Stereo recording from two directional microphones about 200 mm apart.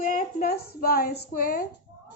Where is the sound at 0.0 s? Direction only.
45° left (ahead or behind).